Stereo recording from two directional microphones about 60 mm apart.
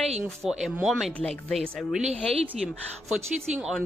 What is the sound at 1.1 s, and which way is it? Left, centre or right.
Speech, left.